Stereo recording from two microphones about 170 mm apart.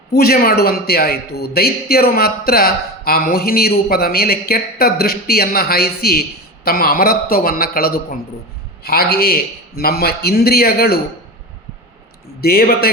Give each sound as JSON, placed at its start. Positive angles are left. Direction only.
{"t": 0.1, "sound": "a man's voice", "side_deg": 65}
{"t": 12.4, "sound": "a man's voice", "side_deg": 65}